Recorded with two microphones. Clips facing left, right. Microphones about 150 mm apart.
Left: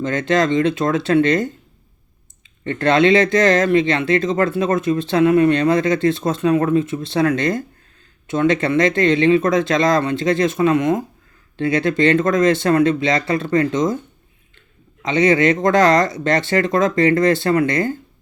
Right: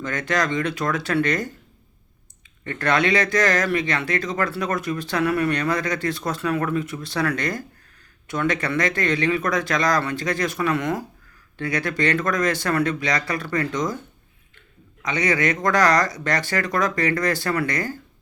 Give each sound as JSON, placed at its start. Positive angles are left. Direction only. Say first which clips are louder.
{"t": 0.0, "sound": "speech", "louder": "left 7 dB", "side_deg": 25}
{"t": 2.6, "sound": "speech", "louder": "left 7 dB", "side_deg": 25}
{"t": 15.0, "sound": "speech", "louder": "left 7 dB", "side_deg": 25}